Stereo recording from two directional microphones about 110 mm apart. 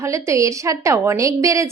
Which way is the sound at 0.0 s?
25° right (ahead or behind).